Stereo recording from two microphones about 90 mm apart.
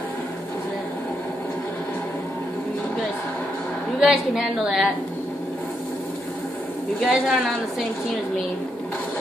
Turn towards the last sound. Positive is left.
turn(degrees=-5)  # may be behind; listen again after turning